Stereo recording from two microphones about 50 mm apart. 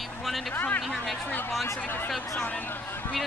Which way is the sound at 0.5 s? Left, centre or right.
Left.